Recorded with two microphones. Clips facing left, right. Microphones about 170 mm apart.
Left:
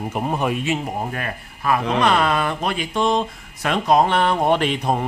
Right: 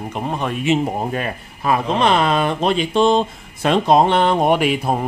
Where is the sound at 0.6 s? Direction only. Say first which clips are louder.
Right 5 dB; 20° right (ahead or behind).